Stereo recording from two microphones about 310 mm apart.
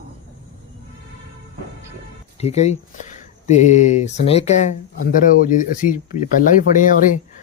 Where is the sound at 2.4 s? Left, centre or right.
Left.